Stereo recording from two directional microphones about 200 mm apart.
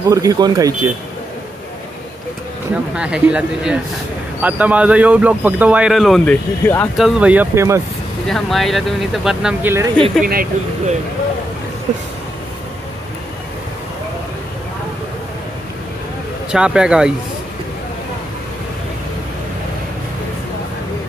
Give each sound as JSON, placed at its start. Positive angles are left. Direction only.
{"t": 0.1, "sound": "speech", "side_deg": -20}
{"t": 2.7, "sound": "speech", "side_deg": -5}
{"t": 7.0, "sound": "speech", "side_deg": -5}
{"t": 8.3, "sound": "speech", "side_deg": 0}
{"t": 10.2, "sound": "speech", "side_deg": -45}
{"t": 16.5, "sound": "speech", "side_deg": -5}